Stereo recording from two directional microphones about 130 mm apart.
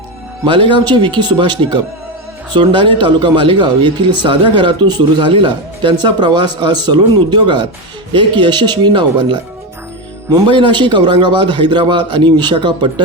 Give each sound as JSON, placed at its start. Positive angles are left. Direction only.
{"t": 0.4, "sound": "speech", "side_deg": -40}
{"t": 10.5, "sound": "speech", "side_deg": -40}